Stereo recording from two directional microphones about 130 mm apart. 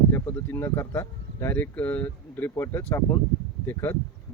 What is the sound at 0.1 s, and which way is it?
Speech, 20° left (ahead or behind).